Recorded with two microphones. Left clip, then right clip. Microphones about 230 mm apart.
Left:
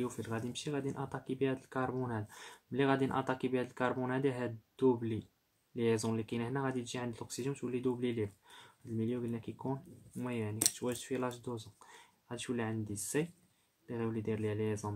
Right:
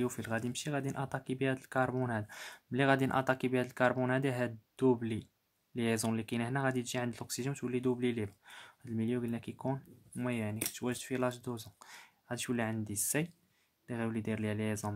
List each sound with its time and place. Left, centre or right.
0.0 s speech: right